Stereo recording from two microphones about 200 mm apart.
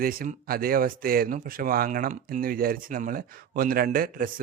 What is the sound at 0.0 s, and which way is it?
Speech, 45° right (ahead or behind).